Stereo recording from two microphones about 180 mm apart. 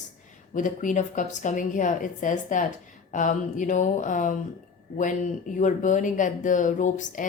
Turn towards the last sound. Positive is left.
turn(degrees=45)  # may be behind; listen again after turning